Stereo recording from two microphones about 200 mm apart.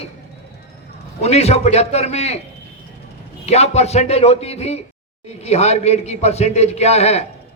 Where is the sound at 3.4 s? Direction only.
30° left (ahead or behind).